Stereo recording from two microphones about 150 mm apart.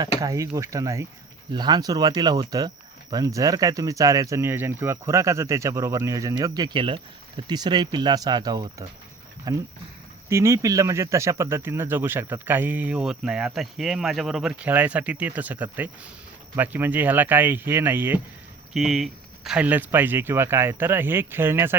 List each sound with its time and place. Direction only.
0.0 s speech: 20° right (ahead or behind)
18.7 s speech: centre (ahead or behind)